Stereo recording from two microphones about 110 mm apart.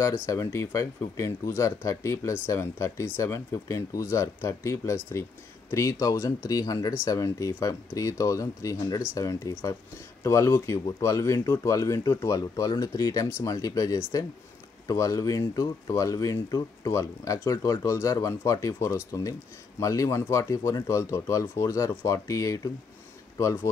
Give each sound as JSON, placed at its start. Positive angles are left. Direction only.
{"t": 0.3, "sound": "speech", "side_deg": 30}